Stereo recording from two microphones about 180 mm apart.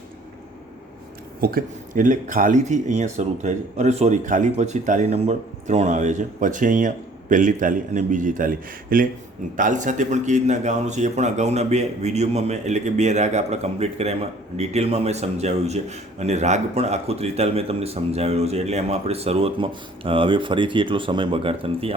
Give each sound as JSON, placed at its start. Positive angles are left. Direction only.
{"t": 1.4, "sound": "a man's voice", "side_deg": -55}